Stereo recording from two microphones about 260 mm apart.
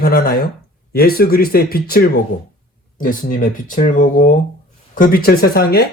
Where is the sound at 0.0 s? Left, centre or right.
Left.